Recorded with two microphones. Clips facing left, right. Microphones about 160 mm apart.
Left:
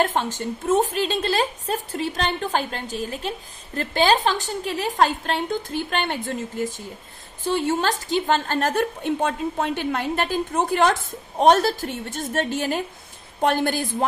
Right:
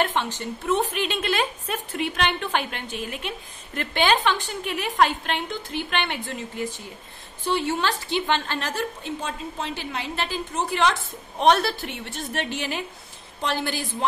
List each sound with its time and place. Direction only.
0.0 s a woman's voice: 45° left (ahead or behind)